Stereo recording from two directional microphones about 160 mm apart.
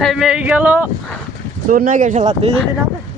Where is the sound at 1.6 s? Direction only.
55° right (ahead or behind).